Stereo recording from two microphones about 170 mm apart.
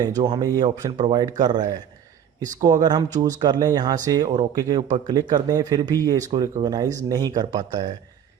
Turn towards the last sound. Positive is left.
turn(degrees=-25)  # may be behind; listen again after turning